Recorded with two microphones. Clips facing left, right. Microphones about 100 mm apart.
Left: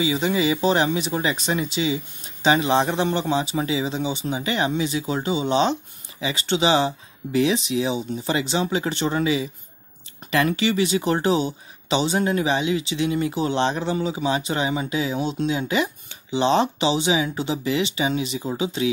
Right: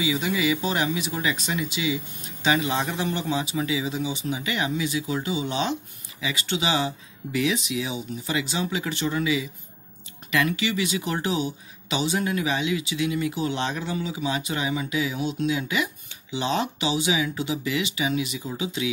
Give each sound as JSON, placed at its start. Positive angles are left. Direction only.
{"t": 0.0, "sound": "speech", "side_deg": 30}